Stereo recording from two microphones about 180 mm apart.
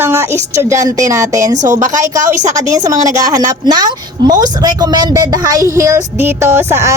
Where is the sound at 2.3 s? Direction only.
40° right (ahead or behind).